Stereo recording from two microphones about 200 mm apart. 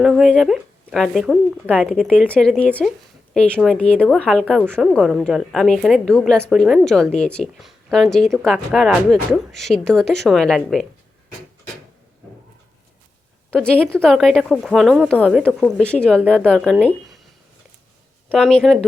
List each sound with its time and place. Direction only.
0.0 s a woman's voice: centre (ahead or behind)
13.6 s a woman's voice: 5° left (ahead or behind)
18.3 s a woman's voice: 5° left (ahead or behind)